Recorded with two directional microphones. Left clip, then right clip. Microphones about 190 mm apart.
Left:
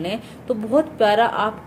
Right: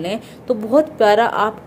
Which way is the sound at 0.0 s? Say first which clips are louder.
Right 3 dB; 20° right (ahead or behind).